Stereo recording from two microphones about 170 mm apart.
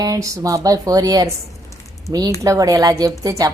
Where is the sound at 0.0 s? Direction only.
20° right (ahead or behind).